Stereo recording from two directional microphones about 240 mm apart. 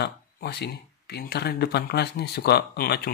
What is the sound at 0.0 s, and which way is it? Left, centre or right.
Speech, left.